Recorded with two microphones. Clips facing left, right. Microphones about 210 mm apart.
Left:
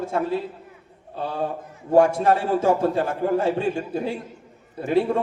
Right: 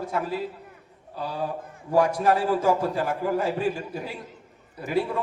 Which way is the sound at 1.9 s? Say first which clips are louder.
Left 4 dB; 25° left (ahead or behind).